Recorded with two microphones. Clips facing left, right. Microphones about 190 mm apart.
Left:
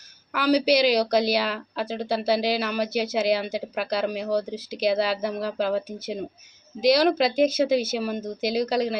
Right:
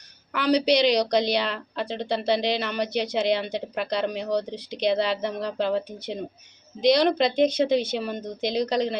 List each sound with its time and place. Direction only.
0.3 s a woman's voice: 5° left (ahead or behind)